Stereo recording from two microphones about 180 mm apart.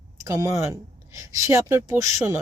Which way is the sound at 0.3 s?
15° right (ahead or behind).